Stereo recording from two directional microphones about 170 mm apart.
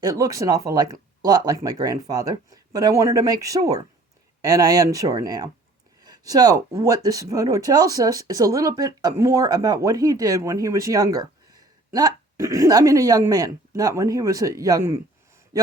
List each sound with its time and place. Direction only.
0.0 s speech: 20° right (ahead or behind)
6.0 s a sound: 25° right (ahead or behind)
6.7 s speech: 20° right (ahead or behind)